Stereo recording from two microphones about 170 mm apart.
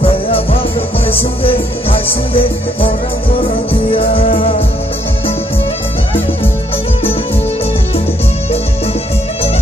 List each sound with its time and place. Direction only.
0.0 s music: 35° left (ahead or behind)
3.9 s music: 35° left (ahead or behind)